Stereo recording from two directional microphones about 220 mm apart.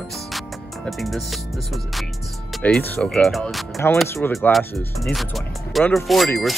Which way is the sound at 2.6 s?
5° left (ahead or behind).